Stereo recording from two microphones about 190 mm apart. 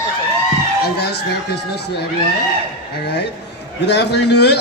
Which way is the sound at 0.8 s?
60° left (ahead or behind).